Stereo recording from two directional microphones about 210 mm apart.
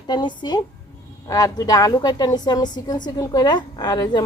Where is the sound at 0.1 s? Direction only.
20° left (ahead or behind).